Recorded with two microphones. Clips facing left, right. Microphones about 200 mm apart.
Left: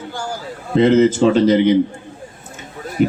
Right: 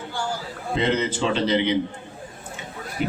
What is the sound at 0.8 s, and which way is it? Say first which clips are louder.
Speech: left 12 dB; 45° left (ahead or behind).